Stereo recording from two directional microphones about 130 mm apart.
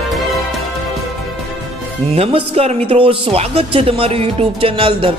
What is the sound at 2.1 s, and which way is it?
Music, 50° right (ahead or behind).